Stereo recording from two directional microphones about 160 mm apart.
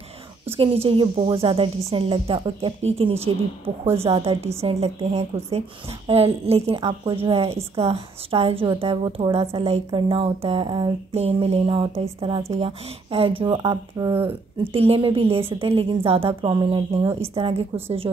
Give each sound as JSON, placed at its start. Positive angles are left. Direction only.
{"t": 0.6, "sound": "a woman's voice", "side_deg": -35}
{"t": 14.6, "sound": "a woman's voice", "side_deg": -35}